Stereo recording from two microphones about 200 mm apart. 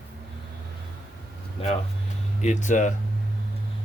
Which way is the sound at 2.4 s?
35° left (ahead or behind).